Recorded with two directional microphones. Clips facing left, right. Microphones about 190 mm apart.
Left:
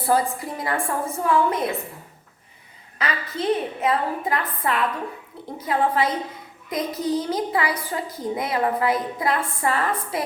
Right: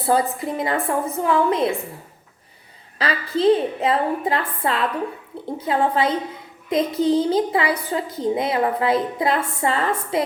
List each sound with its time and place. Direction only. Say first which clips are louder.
0.0 s a woman's voice: right 2 dB; 25° right (ahead or behind)
3.0 s a woman's voice: right 7 dB; 25° right (ahead or behind)